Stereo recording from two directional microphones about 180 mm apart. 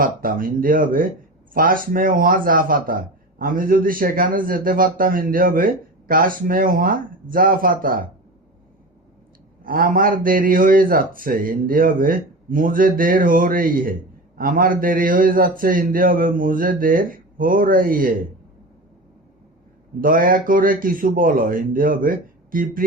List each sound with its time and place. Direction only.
0.0 s a man's voice: 50° right (ahead or behind)
9.6 s a man's voice: 50° right (ahead or behind)
20.0 s a man's voice: 50° right (ahead or behind)